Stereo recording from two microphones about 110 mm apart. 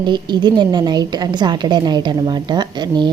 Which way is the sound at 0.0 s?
40° right (ahead or behind).